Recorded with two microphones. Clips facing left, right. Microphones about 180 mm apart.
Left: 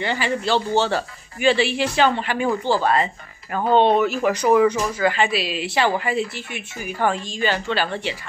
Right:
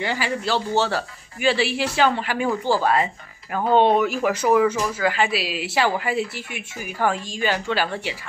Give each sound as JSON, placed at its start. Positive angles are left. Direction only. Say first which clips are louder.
{"t": 0.0, "sound": "speech", "louder": "left 2 dB", "side_deg": -5}